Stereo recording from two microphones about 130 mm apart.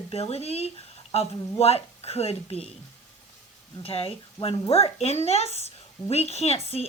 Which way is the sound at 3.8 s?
45° left (ahead or behind).